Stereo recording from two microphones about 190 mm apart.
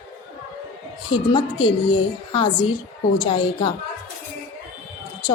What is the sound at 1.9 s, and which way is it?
A woman's voice, 25° left (ahead or behind).